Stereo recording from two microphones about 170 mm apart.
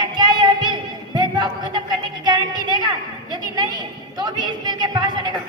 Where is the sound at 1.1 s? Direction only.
25° right (ahead or behind).